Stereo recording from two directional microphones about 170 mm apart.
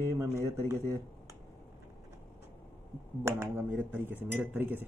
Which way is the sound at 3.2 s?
15° right (ahead or behind).